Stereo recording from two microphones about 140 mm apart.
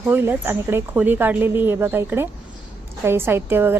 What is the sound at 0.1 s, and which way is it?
A woman's voice, 15° right (ahead or behind).